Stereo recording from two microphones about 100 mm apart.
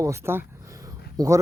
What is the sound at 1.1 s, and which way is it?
Speech, 35° right (ahead or behind).